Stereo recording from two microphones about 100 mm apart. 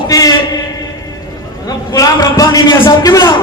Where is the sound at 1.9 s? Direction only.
35° left (ahead or behind).